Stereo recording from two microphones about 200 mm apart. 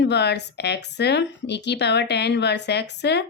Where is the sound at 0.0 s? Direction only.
55° left (ahead or behind).